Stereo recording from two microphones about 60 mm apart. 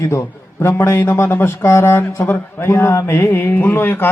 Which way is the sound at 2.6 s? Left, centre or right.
Left.